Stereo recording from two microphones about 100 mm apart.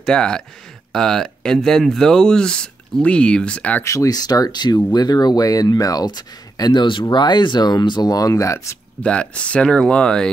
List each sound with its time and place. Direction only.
0.0 s speech: 5° left (ahead or behind)
3.8 s speech: 30° left (ahead or behind)
9.0 s speech: 10° left (ahead or behind)